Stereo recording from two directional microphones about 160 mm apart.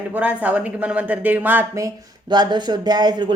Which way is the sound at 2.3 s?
25° right (ahead or behind).